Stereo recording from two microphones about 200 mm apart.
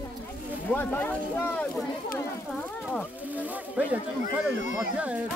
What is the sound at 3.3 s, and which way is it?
Speech, 10° right (ahead or behind).